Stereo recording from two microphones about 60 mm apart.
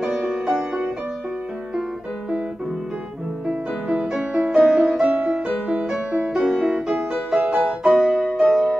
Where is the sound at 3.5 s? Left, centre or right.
Centre.